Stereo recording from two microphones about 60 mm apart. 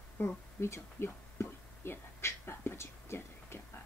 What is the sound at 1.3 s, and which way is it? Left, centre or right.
Whispering, left.